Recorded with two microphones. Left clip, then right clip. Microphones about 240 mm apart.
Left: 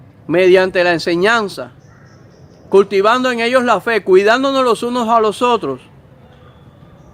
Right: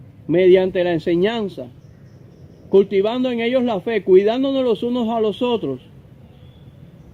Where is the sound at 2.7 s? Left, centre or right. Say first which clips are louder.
Left 5 dB; left.